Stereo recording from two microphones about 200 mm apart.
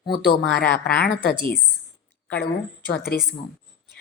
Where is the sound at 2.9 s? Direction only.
50° left (ahead or behind).